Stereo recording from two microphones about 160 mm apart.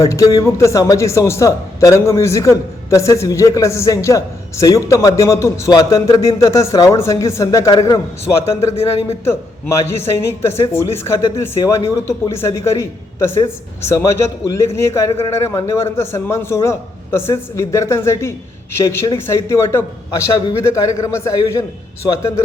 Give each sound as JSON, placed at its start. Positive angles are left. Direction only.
{"t": 0.0, "sound": "a man's voice", "side_deg": 20}
{"t": 8.6, "sound": "speech", "side_deg": 40}
{"t": 9.2, "sound": "a man's voice", "side_deg": 15}